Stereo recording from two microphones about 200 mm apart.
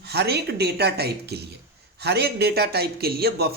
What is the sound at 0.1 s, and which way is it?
Speech, 55° right (ahead or behind).